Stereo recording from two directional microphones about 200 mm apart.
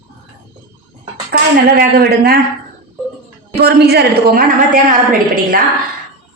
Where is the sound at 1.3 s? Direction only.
50° right (ahead or behind).